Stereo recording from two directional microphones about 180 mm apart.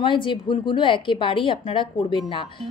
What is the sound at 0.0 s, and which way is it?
Speech, 25° left (ahead or behind).